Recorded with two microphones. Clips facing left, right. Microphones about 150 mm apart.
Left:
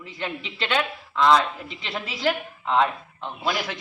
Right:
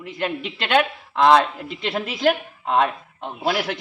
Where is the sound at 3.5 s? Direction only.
65° right (ahead or behind).